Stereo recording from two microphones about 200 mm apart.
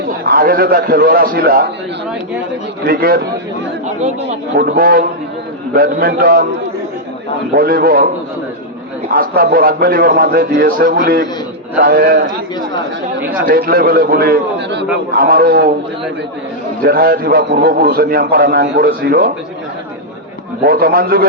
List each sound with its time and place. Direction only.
0.3 s a man's voice: 45° right (ahead or behind)
2.8 s a man's voice: 45° right (ahead or behind)
3.8 s speech: 35° right (ahead or behind)
4.5 s a man's voice: 50° right (ahead or behind)
7.5 s a man's voice: 50° right (ahead or behind)
9.1 s a man's voice: 50° right (ahead or behind)
13.4 s a man's voice: 45° right (ahead or behind)
16.8 s a man's voice: 45° right (ahead or behind)
20.7 s a man's voice: 50° right (ahead or behind)